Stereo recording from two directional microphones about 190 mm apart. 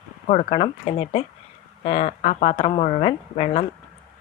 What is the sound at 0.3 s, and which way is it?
Speech, 30° left (ahead or behind).